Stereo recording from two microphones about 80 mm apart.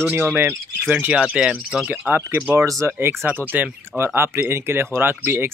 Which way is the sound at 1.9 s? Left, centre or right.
Right.